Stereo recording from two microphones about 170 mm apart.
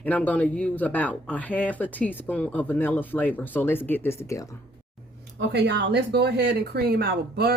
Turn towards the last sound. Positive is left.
turn(degrees=-70)  # may be behind; listen again after turning